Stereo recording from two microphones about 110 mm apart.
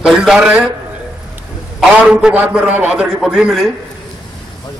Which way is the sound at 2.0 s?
10° right (ahead or behind).